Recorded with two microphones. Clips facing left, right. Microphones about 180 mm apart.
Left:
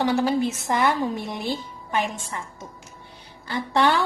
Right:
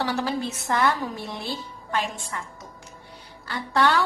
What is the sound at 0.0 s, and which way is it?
A woman's voice, 15° left (ahead or behind).